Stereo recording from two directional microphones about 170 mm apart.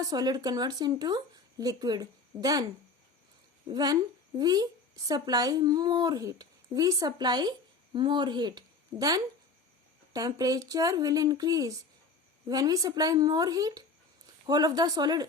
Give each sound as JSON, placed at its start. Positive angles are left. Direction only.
{"t": 0.0, "sound": "speech", "side_deg": -20}
{"t": 3.7, "sound": "speech", "side_deg": -25}